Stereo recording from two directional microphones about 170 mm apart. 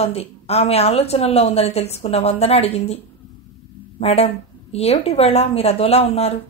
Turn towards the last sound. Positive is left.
turn(degrees=35)  # may be behind; listen again after turning